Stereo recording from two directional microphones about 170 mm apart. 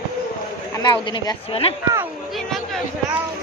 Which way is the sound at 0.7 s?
25° left (ahead or behind).